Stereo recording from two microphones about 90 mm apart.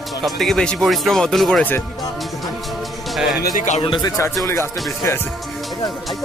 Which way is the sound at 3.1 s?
5° right (ahead or behind).